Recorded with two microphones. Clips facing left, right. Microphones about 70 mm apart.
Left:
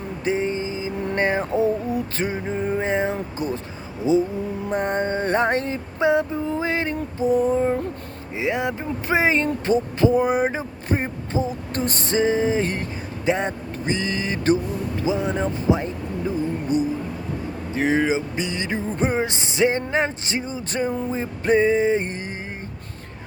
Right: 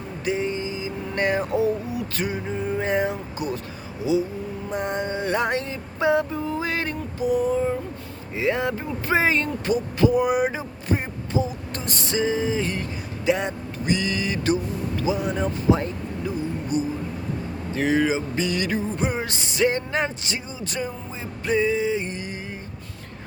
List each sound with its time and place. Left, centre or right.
0.3 s a sound: left
2.8 s speech: left
6.0 s speech: left
7.3 s speech: left
8.4 s speech: centre; by 22.4 s left